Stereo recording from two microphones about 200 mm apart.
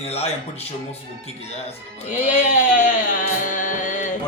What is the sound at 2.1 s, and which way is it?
Speech, 40° left (ahead or behind).